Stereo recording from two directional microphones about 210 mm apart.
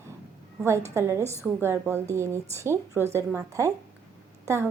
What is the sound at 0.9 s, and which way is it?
A woman's voice, 15° right (ahead or behind).